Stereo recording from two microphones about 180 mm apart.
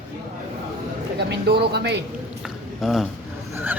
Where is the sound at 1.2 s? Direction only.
70° right (ahead or behind).